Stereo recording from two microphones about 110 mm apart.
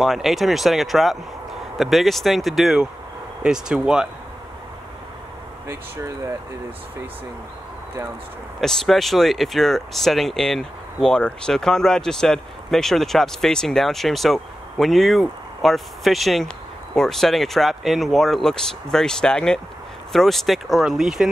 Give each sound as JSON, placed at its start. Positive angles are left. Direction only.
{"t": 0.0, "sound": "speech", "side_deg": 0}
{"t": 5.7, "sound": "speech", "side_deg": -25}
{"t": 8.5, "sound": "speech", "side_deg": 5}